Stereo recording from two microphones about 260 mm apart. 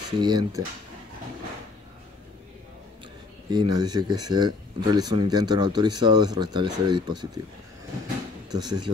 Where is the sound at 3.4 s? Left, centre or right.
Centre.